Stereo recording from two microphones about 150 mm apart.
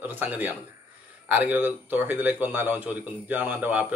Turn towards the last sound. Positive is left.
turn(degrees=-10)  # may be behind; listen again after turning